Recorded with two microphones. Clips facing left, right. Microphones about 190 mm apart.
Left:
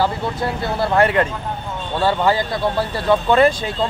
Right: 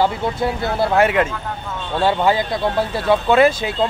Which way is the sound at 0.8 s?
5° right (ahead or behind).